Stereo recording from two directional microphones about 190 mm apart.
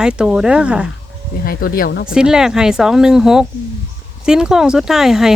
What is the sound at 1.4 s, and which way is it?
Speech, 50° left (ahead or behind).